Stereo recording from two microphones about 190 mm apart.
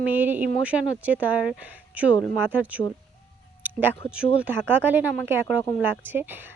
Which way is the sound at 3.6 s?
10° right (ahead or behind).